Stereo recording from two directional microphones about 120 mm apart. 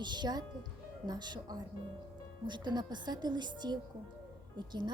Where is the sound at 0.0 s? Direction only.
35° right (ahead or behind).